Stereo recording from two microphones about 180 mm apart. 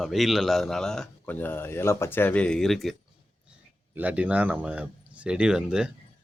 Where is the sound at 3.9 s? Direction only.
10° right (ahead or behind).